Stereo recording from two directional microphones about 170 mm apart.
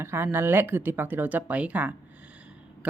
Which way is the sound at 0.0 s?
15° right (ahead or behind).